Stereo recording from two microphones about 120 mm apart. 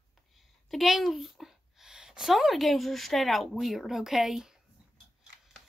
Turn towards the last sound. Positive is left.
turn(degrees=-5)  # may be behind; listen again after turning